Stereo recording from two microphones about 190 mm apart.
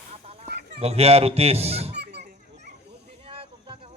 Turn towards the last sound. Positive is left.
turn(degrees=-30)  # may be behind; listen again after turning